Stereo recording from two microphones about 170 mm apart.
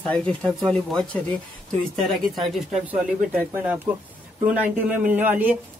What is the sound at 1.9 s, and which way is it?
Speech, centre (ahead or behind).